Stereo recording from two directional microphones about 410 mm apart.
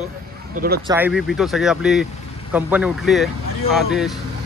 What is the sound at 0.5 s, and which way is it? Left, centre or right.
Speech, right.